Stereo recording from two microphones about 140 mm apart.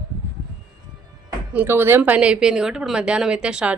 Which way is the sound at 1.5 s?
15° right (ahead or behind).